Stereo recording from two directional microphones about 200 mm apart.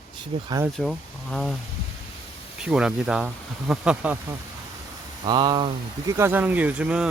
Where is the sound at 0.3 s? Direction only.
30° right (ahead or behind).